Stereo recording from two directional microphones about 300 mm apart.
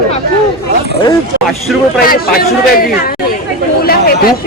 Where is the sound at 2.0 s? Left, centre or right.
Left.